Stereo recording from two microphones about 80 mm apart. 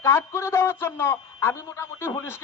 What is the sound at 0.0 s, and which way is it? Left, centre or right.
A man's voice, left.